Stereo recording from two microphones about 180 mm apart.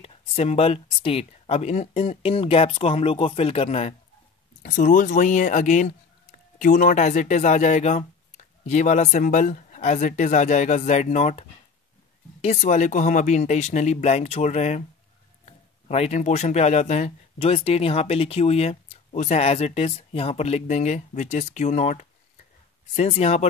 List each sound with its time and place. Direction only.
0.0 s speech: 35° left (ahead or behind)
15.9 s speech: 40° left (ahead or behind)